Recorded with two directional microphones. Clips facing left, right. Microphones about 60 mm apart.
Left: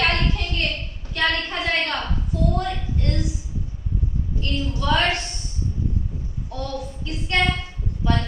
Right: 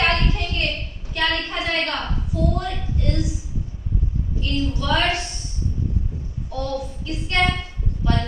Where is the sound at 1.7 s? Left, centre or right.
Centre.